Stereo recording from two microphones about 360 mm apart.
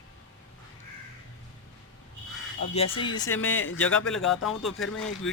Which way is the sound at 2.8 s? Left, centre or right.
Centre.